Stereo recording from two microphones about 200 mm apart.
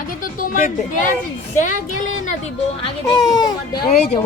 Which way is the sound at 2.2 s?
35° left (ahead or behind).